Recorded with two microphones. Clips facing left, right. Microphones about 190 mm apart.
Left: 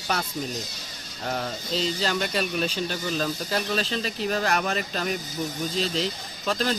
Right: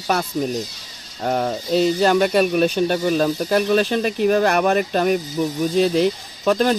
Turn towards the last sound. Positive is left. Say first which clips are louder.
# right 9 dB
turn(degrees=-55)  # may be behind; listen again after turning